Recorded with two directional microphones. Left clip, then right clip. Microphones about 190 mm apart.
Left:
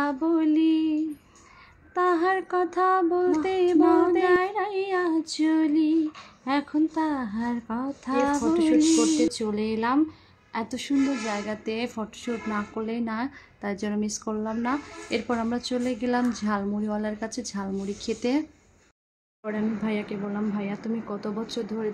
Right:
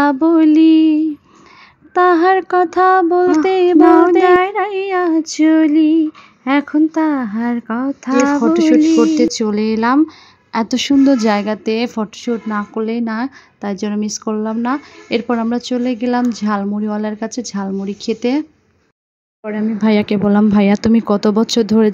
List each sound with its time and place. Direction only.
0.0 s a sound: 40° right (ahead or behind)
2.0 s a woman's voice: 40° right (ahead or behind)
19.4 s a woman's voice: 35° right (ahead or behind)
19.9 s speech: 50° right (ahead or behind)